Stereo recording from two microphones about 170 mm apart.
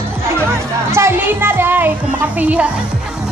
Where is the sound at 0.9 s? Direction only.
15° right (ahead or behind).